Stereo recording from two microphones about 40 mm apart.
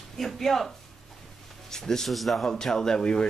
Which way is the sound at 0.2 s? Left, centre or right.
Centre.